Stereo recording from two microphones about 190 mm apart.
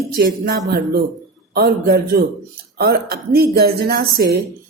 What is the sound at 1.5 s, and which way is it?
Speech, 55° right (ahead or behind).